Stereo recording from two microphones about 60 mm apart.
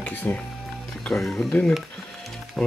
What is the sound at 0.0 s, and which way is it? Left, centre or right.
Music, left.